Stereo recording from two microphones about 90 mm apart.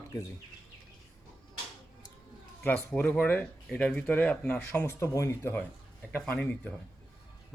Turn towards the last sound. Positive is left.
turn(degrees=15)  # may be behind; listen again after turning